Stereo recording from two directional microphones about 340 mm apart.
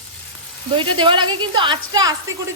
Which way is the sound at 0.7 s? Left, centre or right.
Centre.